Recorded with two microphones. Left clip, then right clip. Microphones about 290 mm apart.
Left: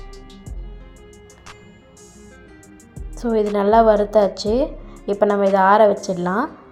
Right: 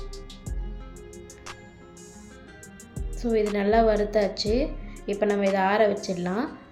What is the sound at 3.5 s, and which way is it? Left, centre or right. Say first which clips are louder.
Speech: left 9 dB; centre.